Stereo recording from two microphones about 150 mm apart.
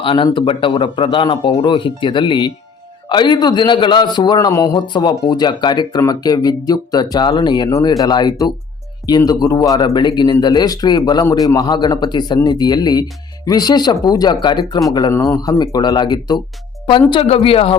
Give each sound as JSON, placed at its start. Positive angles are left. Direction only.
{"t": 0.0, "sound": "a man's voice", "side_deg": 35}
{"t": 17.1, "sound": "speech", "side_deg": 40}